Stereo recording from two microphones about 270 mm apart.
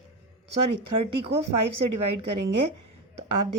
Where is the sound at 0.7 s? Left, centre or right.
Right.